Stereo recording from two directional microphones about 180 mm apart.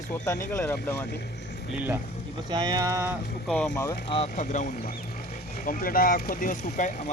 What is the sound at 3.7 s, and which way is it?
Speech, 15° left (ahead or behind).